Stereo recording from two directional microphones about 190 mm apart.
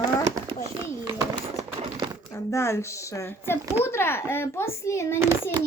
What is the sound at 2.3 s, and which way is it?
Speech, 15° left (ahead or behind).